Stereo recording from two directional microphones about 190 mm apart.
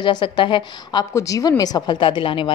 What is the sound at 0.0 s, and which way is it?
Speech, 25° left (ahead or behind).